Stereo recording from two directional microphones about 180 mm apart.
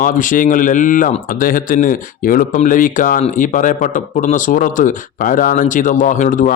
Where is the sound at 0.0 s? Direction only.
45° left (ahead or behind).